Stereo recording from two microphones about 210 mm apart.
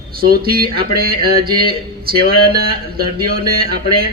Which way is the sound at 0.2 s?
45° right (ahead or behind).